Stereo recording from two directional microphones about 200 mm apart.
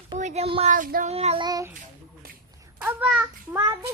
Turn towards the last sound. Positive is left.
turn(degrees=-5)  # may be behind; listen again after turning